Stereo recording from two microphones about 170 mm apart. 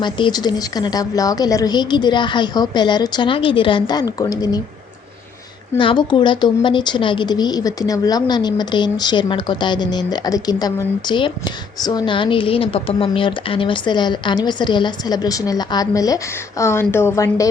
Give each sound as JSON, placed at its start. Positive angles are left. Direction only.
{"t": 0.0, "sound": "speech", "side_deg": 25}
{"t": 5.7, "sound": "speech", "side_deg": 30}